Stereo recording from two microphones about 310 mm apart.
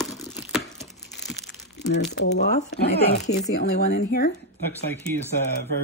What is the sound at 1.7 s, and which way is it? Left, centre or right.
Speech, left.